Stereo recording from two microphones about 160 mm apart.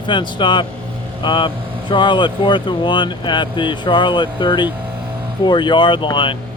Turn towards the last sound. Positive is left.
turn(degrees=30)  # may be behind; listen again after turning